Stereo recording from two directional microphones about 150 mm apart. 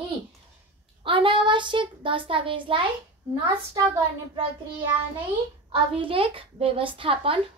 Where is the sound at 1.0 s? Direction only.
35° right (ahead or behind).